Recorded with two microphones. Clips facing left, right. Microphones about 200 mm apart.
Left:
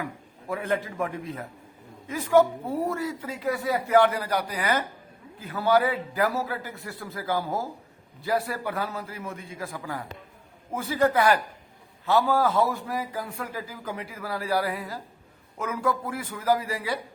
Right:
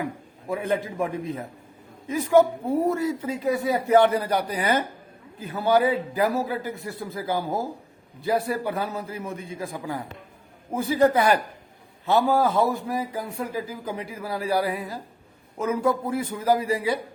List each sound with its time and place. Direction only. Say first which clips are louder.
0.0 s a man's voice: right 4 dB; 20° right (ahead or behind)